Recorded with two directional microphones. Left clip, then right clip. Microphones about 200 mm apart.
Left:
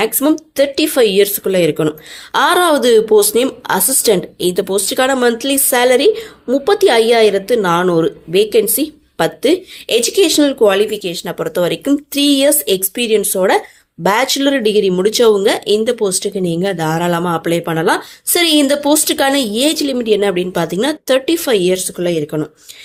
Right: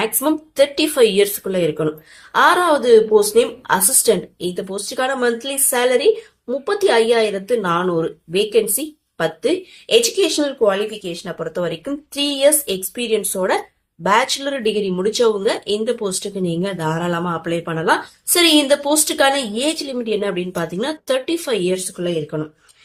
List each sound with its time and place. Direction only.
0.0 s a woman's voice: 35° left (ahead or behind)